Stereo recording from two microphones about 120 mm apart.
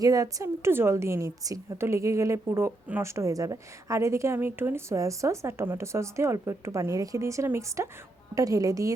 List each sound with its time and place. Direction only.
0.0 s a woman's voice: 30° right (ahead or behind)